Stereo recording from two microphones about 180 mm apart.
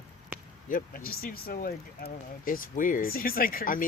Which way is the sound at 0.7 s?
50° left (ahead or behind).